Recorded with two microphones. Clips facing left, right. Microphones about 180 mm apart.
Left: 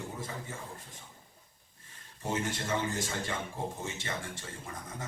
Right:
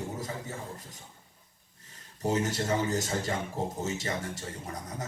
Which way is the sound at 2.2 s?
40° right (ahead or behind).